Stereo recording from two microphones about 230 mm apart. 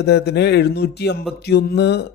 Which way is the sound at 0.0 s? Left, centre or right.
Left.